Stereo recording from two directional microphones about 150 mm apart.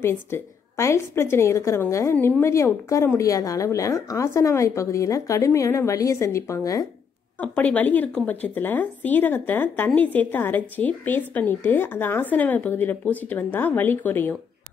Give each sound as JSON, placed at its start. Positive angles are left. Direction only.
{"t": 0.0, "sound": "a woman's voice", "side_deg": 15}
{"t": 7.3, "sound": "a woman's voice", "side_deg": 10}